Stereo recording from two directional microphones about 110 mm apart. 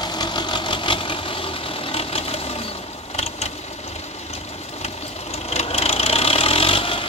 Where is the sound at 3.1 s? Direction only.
70° left (ahead or behind).